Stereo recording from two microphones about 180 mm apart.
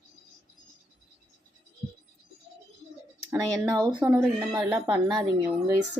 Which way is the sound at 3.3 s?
15° right (ahead or behind).